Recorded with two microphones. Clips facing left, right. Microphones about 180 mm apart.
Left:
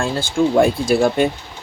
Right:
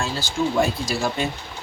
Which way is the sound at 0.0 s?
55° left (ahead or behind).